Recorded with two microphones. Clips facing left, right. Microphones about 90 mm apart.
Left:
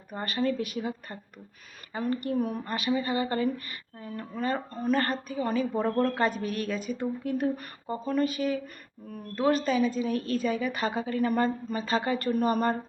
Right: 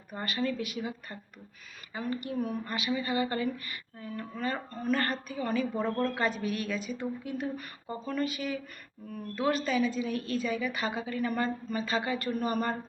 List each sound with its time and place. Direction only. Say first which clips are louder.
0.1 s speech: left 3 dB; 35° left (ahead or behind)